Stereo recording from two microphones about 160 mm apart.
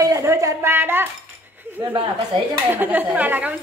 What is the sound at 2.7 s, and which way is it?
Speech, 10° right (ahead or behind).